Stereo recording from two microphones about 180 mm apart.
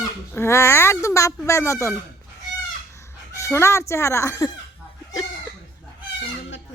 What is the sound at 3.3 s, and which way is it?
Speech, 15° left (ahead or behind).